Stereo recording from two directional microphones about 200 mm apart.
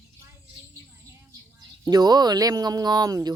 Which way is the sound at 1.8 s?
20° right (ahead or behind).